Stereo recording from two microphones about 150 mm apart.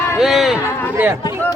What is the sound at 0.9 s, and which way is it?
Speech, 15° right (ahead or behind).